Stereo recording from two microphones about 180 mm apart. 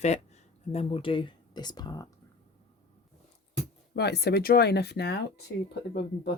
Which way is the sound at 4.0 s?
65° left (ahead or behind).